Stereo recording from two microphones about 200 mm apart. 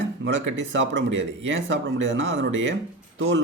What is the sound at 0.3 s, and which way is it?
Speech, 70° right (ahead or behind).